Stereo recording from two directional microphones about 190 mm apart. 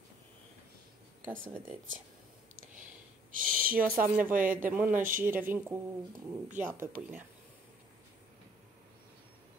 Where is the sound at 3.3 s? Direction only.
45° right (ahead or behind).